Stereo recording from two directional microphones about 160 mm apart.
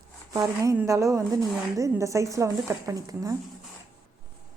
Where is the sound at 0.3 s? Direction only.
20° right (ahead or behind).